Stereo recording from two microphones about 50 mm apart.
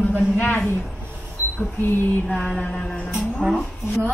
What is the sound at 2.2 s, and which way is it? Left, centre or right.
Speech, left.